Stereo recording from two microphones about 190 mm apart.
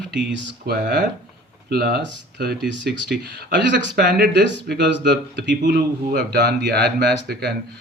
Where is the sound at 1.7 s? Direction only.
60° right (ahead or behind).